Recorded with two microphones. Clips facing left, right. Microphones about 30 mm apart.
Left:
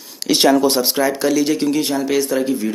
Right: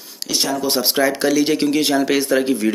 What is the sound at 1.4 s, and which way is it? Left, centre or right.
Speech, right.